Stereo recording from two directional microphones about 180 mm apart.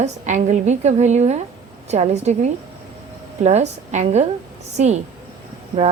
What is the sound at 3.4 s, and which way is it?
A woman's voice, 40° right (ahead or behind).